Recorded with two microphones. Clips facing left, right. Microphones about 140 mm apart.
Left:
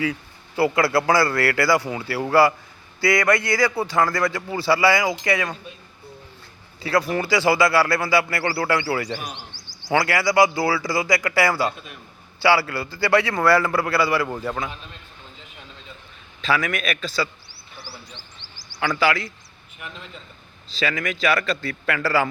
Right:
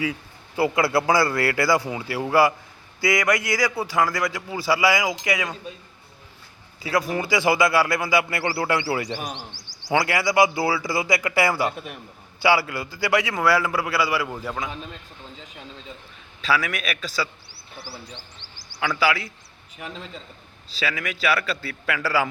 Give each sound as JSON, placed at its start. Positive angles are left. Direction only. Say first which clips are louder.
{"t": 0.0, "sound": "a man's voice", "louder": "left 2 dB", "side_deg": -20}
{"t": 7.1, "sound": "a man's voice", "louder": "even", "side_deg": -20}
{"t": 9.6, "sound": "a sound", "louder": "left 1 dB", "side_deg": -90}
{"t": 9.9, "sound": "a man's voice", "louder": "left 1 dB", "side_deg": -20}
{"t": 16.4, "sound": "a man's voice", "louder": "left 1 dB", "side_deg": -5}
{"t": 18.8, "sound": "a man's voice", "louder": "left 2 dB", "side_deg": -5}
{"t": 19.8, "sound": "a man's voice", "louder": "right 3 dB", "side_deg": -35}
{"t": 20.7, "sound": "a man's voice", "louder": "left 3 dB", "side_deg": -5}